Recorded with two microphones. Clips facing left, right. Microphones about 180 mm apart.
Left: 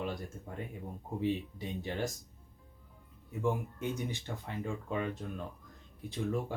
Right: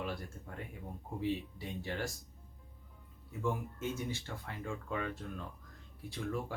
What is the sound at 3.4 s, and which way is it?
Speech, 15° left (ahead or behind).